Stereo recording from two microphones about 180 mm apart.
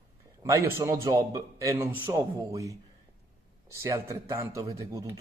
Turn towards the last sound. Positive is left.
turn(degrees=-20)  # may be behind; listen again after turning